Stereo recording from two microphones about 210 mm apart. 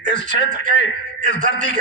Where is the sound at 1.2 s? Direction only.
40° right (ahead or behind).